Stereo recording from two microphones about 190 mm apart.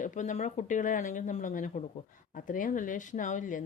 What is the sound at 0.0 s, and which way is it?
Speech, 40° left (ahead or behind).